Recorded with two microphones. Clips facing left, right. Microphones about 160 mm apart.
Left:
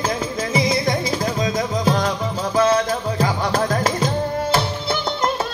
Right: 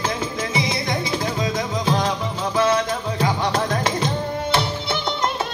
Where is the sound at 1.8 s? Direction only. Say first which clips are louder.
Left 1 dB; 45° left (ahead or behind).